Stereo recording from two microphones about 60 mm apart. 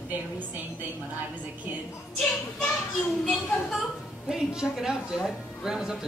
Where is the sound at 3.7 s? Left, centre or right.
Centre.